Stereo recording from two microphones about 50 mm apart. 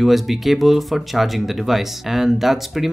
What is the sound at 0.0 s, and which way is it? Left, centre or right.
Speech, centre.